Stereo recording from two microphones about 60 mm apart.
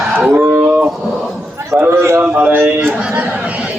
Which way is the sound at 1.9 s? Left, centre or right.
Right.